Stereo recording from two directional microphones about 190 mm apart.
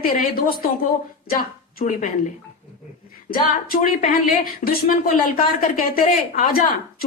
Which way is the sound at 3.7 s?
45° left (ahead or behind).